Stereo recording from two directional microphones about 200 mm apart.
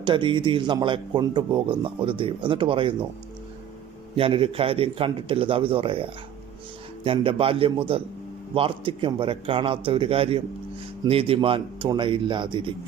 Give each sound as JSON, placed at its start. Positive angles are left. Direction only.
{"t": 0.0, "sound": "a man's voice", "side_deg": -25}
{"t": 4.1, "sound": "a man's voice", "side_deg": -25}